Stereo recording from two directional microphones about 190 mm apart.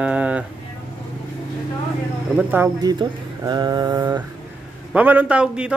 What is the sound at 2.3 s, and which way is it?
Speech, 10° right (ahead or behind).